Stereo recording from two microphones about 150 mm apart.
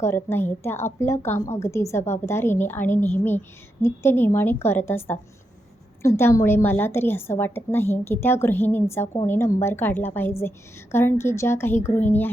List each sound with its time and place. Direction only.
0.0 s a woman's voice: 15° left (ahead or behind)